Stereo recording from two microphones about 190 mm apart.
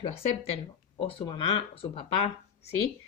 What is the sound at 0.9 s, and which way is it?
Speech, 25° left (ahead or behind).